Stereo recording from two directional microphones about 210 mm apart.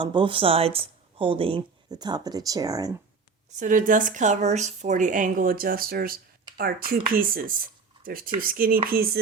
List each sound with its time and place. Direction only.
0.0 s speech: 20° right (ahead or behind)
3.6 s a woman's voice: 40° right (ahead or behind)